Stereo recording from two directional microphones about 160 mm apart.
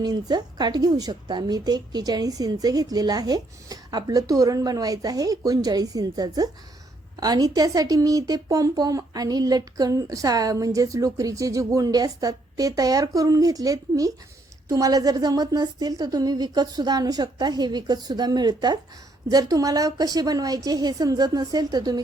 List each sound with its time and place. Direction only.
0.0 s speech: 25° right (ahead or behind)